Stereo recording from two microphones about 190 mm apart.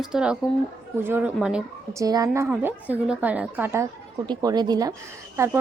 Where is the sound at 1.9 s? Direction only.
15° right (ahead or behind).